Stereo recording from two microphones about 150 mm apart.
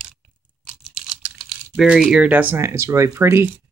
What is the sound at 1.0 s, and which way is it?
Computer keyboard, 40° right (ahead or behind).